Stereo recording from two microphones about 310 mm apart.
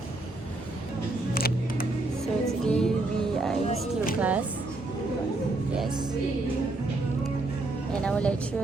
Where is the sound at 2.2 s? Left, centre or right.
Centre.